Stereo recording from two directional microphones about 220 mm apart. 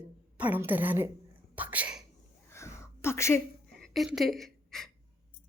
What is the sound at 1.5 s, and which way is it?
Whispering, 5° right (ahead or behind).